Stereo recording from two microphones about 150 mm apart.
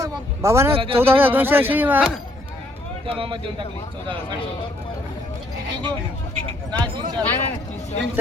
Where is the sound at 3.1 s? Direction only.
35° right (ahead or behind).